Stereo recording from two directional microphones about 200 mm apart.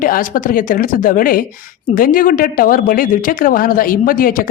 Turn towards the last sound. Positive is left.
turn(degrees=45)  # may be behind; listen again after turning